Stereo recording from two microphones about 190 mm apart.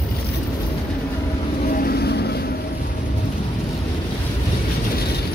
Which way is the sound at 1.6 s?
50° left (ahead or behind).